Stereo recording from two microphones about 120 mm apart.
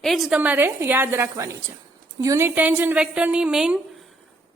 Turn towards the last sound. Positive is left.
turn(degrees=-5)  # may be behind; listen again after turning